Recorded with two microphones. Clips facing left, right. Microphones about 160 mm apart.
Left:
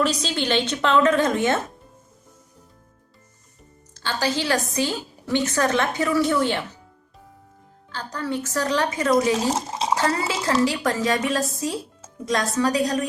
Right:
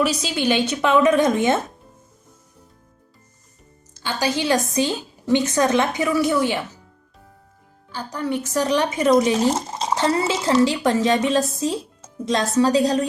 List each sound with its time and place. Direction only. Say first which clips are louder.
0.0 s a woman's voice: right 2 dB; 10° right (ahead or behind)
3.9 s a woman's voice: right 1 dB; 15° right (ahead or behind)
7.9 s a woman's voice: right 3 dB; 15° right (ahead or behind)
9.3 s speech: right 3 dB; 5° left (ahead or behind)
9.9 s a woman's voice: right 3 dB; 20° right (ahead or behind)